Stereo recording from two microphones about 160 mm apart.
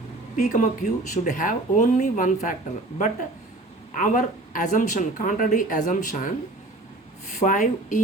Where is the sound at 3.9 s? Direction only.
55° left (ahead or behind).